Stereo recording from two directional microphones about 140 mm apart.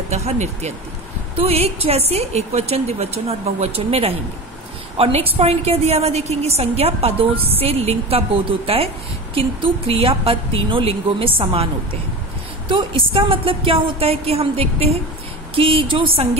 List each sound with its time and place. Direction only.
0.1 s a woman's voice: 50° right (ahead or behind)